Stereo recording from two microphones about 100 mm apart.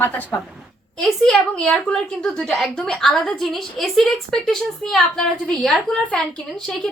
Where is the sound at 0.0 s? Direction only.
15° left (ahead or behind).